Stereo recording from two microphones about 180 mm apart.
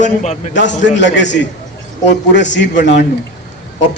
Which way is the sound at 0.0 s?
40° left (ahead or behind).